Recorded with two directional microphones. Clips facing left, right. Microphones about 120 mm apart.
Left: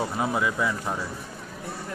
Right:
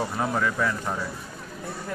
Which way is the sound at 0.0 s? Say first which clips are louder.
Even; 10° left (ahead or behind).